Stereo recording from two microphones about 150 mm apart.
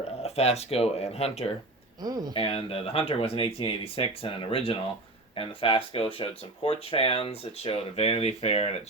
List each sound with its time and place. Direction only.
0.2 s speech: 45° left (ahead or behind)
2.0 s speech: 25° right (ahead or behind)
2.3 s speech: 35° left (ahead or behind)